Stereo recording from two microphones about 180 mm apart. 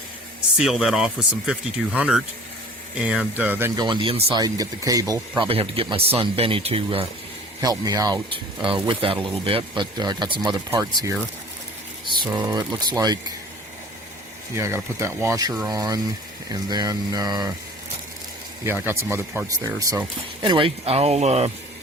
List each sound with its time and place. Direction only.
0.5 s speech: 5° right (ahead or behind)
3.8 s speech: 25° right (ahead or behind)
5.5 s speech: 30° right (ahead or behind)
7.6 s speech: 20° right (ahead or behind)
14.5 s speech: 15° right (ahead or behind)
18.6 s speech: 10° right (ahead or behind); by 21.5 s 35° right (ahead or behind)